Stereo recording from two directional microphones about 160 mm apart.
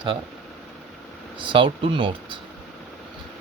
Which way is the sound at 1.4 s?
30° right (ahead or behind).